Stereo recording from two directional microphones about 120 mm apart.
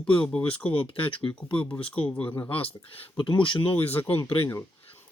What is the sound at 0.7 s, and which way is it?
Speech, 45° left (ahead or behind).